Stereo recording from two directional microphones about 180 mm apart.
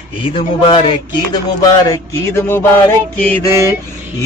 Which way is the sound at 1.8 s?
20° left (ahead or behind).